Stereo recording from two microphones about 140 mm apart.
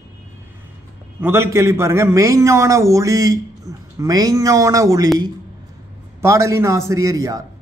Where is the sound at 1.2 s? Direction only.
20° right (ahead or behind).